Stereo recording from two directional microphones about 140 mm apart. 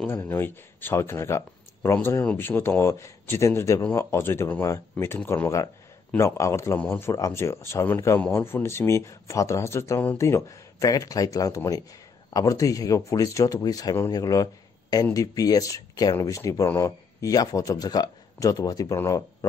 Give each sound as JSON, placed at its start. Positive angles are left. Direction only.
{"t": 0.0, "sound": "speech", "side_deg": 15}